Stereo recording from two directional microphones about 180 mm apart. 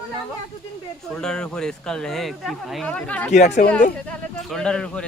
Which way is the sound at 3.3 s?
40° left (ahead or behind).